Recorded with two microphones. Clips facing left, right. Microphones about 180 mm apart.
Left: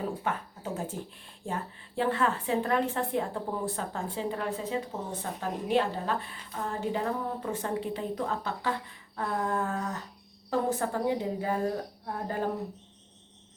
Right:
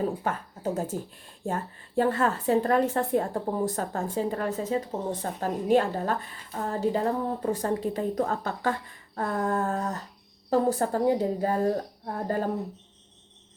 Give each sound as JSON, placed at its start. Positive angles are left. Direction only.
{"t": 0.0, "sound": "a woman's voice", "side_deg": -40}